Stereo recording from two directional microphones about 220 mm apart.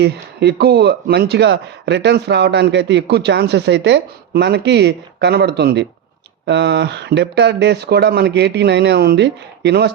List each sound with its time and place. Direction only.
0.0 s speech: 50° right (ahead or behind)